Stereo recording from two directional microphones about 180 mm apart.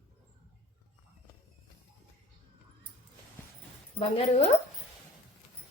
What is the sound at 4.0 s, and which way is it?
Speech, 35° left (ahead or behind).